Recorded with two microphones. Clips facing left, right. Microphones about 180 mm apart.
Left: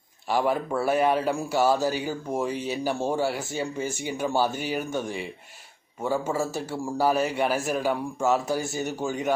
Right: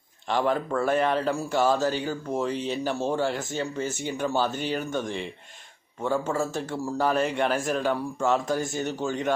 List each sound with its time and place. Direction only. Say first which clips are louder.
0.3 s speech: even; 10° left (ahead or behind)